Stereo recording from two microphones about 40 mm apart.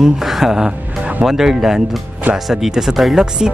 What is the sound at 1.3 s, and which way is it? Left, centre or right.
Speech, centre.